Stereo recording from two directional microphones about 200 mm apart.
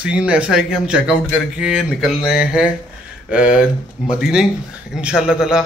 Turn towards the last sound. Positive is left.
turn(degrees=-5)  # may be behind; listen again after turning